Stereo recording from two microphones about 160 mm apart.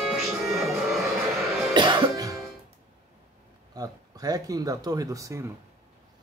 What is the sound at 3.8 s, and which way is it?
Speech, 20° right (ahead or behind).